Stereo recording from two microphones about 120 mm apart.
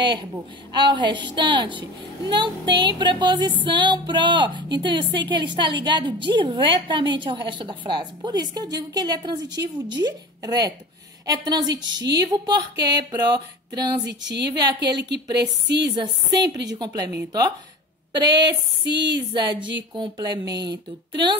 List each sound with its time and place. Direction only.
0.0 s a woman's voice: 40° right (ahead or behind)
18.1 s a woman's voice: 40° right (ahead or behind)